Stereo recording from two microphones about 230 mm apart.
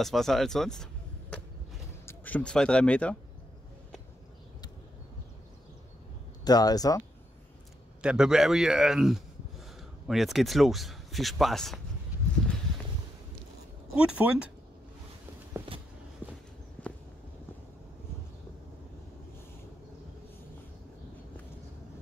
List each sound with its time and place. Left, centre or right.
0.0 s a man's voice: centre
2.0 s speech: centre
6.4 s speech: centre
8.0 s a man's voice: centre
13.9 s a man's voice: centre
15.5 s a sound: right
16.2 s walk: centre
16.8 s a sound: centre